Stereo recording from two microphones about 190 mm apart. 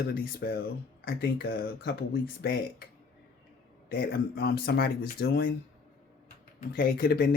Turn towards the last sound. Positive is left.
turn(degrees=50)  # may be behind; listen again after turning